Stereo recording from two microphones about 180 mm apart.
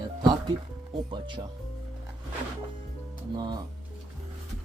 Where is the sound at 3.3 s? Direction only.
25° right (ahead or behind).